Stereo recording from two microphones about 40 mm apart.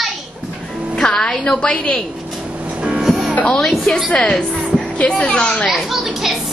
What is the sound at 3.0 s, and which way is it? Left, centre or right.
Music, centre.